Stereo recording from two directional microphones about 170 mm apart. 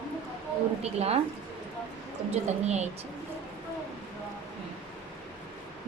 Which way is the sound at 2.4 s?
40° right (ahead or behind).